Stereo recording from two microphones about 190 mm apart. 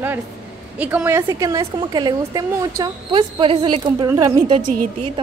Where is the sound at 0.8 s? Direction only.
10° right (ahead or behind).